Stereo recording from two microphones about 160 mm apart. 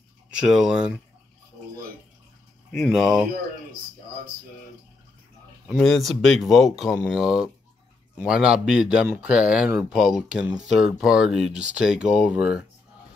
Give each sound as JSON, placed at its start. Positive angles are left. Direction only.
{"t": 0.4, "sound": "speech", "side_deg": 0}
{"t": 3.0, "sound": "speech", "side_deg": -5}
{"t": 5.7, "sound": "speech", "side_deg": 0}